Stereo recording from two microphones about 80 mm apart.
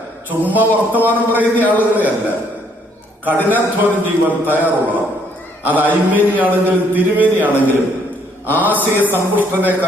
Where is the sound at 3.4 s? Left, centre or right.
Right.